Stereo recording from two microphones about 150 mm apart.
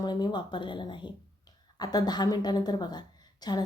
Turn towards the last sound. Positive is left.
turn(degrees=30)  # may be behind; listen again after turning